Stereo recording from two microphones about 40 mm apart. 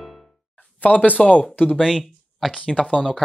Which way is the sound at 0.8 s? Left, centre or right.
Left.